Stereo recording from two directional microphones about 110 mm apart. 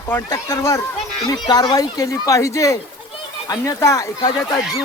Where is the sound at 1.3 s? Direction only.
40° left (ahead or behind).